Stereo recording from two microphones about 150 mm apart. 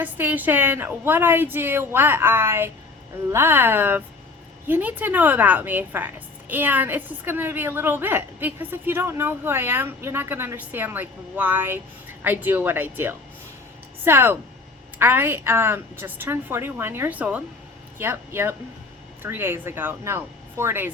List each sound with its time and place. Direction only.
0.0 s a woman's voice: 10° right (ahead or behind)